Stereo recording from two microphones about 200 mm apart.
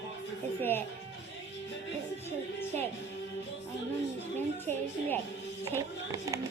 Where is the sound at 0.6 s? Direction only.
10° left (ahead or behind).